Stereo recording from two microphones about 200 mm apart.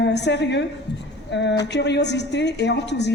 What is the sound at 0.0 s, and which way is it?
A woman's voice, 60° left (ahead or behind).